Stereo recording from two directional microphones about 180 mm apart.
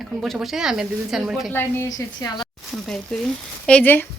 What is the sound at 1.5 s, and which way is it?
Speech, 15° left (ahead or behind).